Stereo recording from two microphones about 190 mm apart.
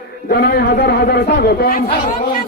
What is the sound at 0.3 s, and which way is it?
Speech, 60° left (ahead or behind).